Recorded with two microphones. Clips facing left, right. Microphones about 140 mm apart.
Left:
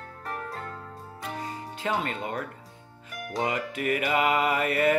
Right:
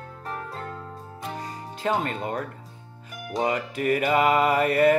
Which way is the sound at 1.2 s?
35° right (ahead or behind).